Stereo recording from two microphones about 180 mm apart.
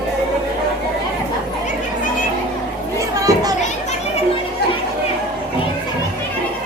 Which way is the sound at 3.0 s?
20° right (ahead or behind).